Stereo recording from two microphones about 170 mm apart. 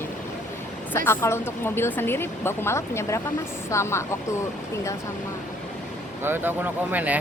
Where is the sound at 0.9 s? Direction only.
15° left (ahead or behind).